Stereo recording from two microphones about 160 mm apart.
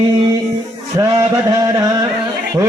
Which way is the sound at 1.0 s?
20° right (ahead or behind).